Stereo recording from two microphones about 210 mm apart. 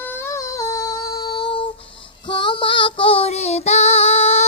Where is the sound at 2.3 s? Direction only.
20° left (ahead or behind).